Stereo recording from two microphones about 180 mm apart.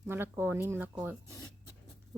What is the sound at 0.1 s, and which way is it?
Speech, 10° right (ahead or behind).